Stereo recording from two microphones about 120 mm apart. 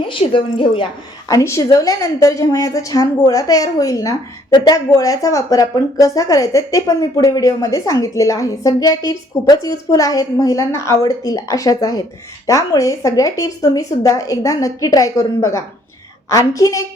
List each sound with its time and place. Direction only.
0.0 s a woman's voice: 45° left (ahead or behind)
1.3 s speech: 25° left (ahead or behind)